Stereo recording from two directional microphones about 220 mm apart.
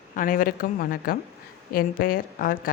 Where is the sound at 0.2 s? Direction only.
40° left (ahead or behind).